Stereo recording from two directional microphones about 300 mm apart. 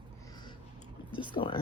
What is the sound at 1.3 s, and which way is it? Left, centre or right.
Speech, centre.